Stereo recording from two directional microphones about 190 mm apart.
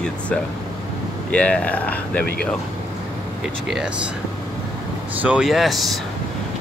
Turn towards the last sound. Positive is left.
turn(degrees=0)  # may be behind; listen again after turning